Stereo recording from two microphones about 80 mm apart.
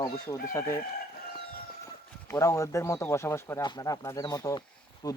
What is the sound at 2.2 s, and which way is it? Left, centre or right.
Speech, left.